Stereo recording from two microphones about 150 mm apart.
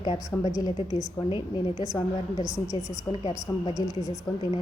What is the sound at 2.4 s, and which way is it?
A woman's voice, 20° left (ahead or behind).